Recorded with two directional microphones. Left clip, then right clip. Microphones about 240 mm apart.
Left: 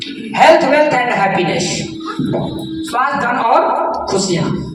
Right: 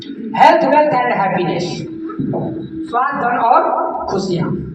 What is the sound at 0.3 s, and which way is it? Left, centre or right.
A woman's voice, left.